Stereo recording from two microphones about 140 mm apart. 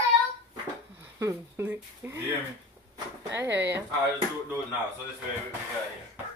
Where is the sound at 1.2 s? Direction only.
15° right (ahead or behind).